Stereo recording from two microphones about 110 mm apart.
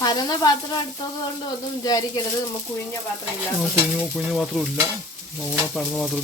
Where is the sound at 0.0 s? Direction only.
40° left (ahead or behind).